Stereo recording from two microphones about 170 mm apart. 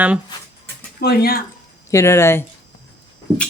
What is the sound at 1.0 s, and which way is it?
Speech, 65° left (ahead or behind).